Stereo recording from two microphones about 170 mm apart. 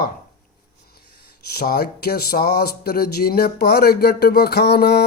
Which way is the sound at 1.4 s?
65° left (ahead or behind).